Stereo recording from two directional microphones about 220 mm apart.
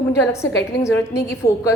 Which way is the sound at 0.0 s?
15° left (ahead or behind).